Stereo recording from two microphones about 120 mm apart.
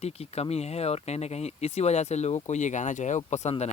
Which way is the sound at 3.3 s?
70° left (ahead or behind).